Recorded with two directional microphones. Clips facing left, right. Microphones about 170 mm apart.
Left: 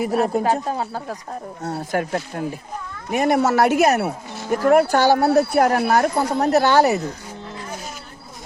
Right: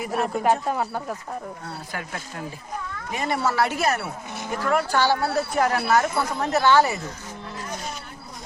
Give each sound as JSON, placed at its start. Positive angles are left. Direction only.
{"t": 0.0, "sound": "speech", "side_deg": 35}
{"t": 1.6, "sound": "speech", "side_deg": 45}